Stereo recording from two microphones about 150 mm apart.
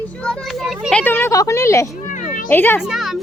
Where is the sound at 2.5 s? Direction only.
15° left (ahead or behind).